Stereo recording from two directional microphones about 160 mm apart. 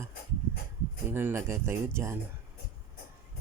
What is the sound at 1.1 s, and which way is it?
Speech, 15° right (ahead or behind).